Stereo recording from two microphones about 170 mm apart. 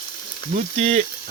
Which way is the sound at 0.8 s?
40° right (ahead or behind).